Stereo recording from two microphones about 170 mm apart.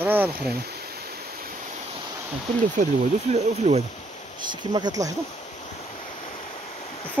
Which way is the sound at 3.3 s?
40° right (ahead or behind).